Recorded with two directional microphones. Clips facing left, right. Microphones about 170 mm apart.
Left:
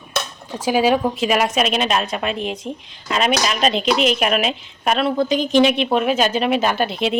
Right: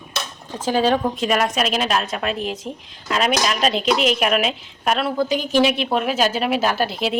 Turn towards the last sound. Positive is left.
turn(degrees=-5)  # may be behind; listen again after turning